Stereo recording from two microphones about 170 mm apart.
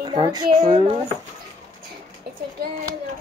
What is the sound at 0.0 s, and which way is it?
Speech, 25° right (ahead or behind).